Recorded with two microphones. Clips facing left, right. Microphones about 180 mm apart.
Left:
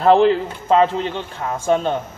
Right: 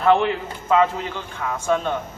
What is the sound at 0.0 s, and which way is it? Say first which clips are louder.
A man's voice: left 5 dB; 35° left (ahead or behind).